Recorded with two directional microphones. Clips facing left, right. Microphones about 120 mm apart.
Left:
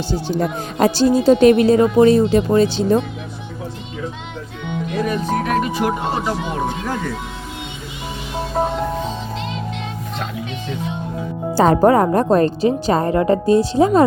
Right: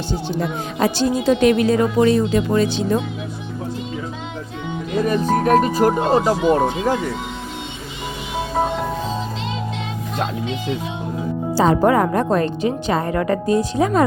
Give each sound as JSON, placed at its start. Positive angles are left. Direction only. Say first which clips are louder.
{"t": 0.8, "sound": "speech", "louder": "left 4 dB", "side_deg": 35}
{"t": 5.0, "sound": "speech", "louder": "right 5 dB", "side_deg": -40}
{"t": 11.5, "sound": "speech", "louder": "left 2 dB", "side_deg": 55}
{"t": 11.9, "sound": "speech", "louder": "left 3 dB", "side_deg": 35}